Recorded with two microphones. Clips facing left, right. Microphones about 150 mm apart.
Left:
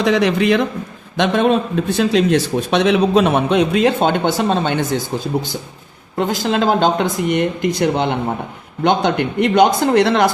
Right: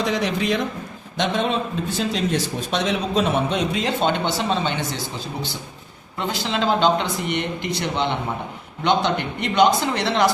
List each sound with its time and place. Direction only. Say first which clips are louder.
0.0 s a man's voice: left 7 dB; 75° left (ahead or behind)
1.1 s speech: left 7 dB; 60° left (ahead or behind)